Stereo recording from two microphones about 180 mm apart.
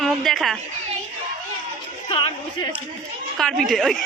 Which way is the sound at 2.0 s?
30° left (ahead or behind).